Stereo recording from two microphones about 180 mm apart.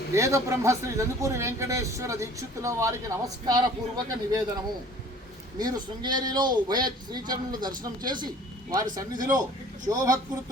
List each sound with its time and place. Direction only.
0.1 s speech: 15° right (ahead or behind)
5.5 s a man's voice: 20° right (ahead or behind)
9.1 s a man's voice: 45° right (ahead or behind)
9.8 s a man's voice: 20° right (ahead or behind)